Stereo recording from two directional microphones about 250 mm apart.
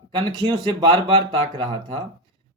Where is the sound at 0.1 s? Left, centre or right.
Centre.